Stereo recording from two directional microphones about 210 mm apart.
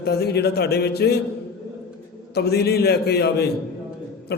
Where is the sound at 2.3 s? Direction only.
50° left (ahead or behind).